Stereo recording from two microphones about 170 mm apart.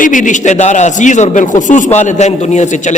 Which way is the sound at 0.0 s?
50° left (ahead or behind).